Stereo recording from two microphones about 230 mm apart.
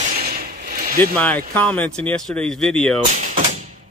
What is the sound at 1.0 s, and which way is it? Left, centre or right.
Speech, centre.